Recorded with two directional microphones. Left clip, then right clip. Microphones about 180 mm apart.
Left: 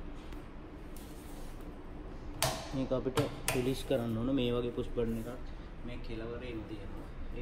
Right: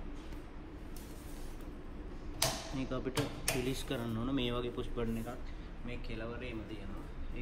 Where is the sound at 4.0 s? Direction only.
25° left (ahead or behind).